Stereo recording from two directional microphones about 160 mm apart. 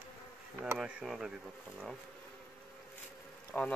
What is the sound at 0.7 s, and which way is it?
Speech, 5° right (ahead or behind).